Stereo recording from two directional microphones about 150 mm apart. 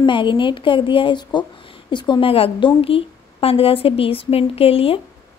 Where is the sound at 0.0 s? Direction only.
30° left (ahead or behind).